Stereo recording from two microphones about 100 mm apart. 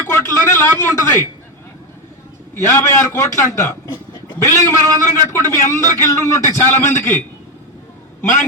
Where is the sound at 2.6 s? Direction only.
30° left (ahead or behind).